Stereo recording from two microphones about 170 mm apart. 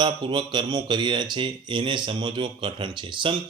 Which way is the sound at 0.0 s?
30° right (ahead or behind).